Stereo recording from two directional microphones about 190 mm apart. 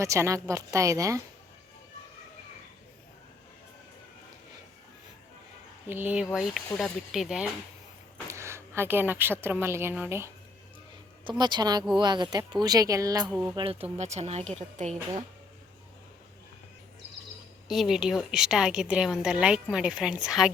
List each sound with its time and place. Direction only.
0.0 s a woman's voice: 15° right (ahead or behind)
5.9 s a woman's voice: 10° right (ahead or behind)
8.3 s a woman's voice: 15° right (ahead or behind)
11.3 s speech: 25° right (ahead or behind)
13.2 s a woman's voice: centre (ahead or behind)
13.9 s a woman's voice: 35° right (ahead or behind)
17.7 s a woman's voice: centre (ahead or behind)